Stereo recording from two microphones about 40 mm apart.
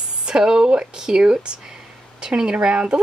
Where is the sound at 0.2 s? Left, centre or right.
Centre.